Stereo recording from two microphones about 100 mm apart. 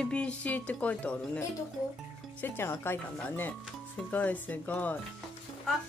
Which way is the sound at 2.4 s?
20° left (ahead or behind).